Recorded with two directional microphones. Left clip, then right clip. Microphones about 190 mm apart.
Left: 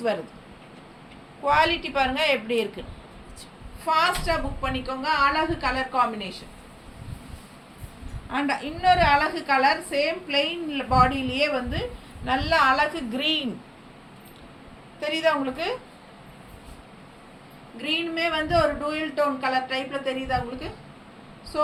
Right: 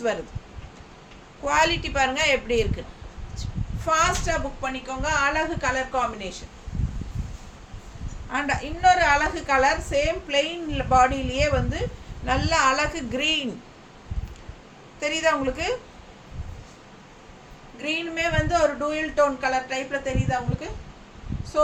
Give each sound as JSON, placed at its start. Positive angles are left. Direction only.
{"t": 1.5, "sound": "a woman's voice", "side_deg": -25}
{"t": 3.8, "sound": "a woman's voice", "side_deg": -15}
{"t": 8.3, "sound": "a woman's voice", "side_deg": -20}
{"t": 15.0, "sound": "a woman's voice", "side_deg": -20}
{"t": 17.8, "sound": "a woman's voice", "side_deg": -15}